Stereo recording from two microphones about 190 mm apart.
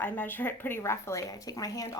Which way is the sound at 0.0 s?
10° left (ahead or behind).